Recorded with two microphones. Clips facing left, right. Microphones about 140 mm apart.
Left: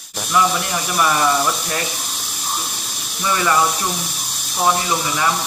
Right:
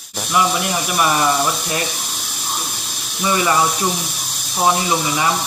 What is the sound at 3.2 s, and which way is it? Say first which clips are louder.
Speech: right 1 dB; 15° right (ahead or behind).